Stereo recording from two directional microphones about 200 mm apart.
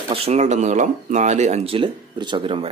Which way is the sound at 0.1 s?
30° right (ahead or behind).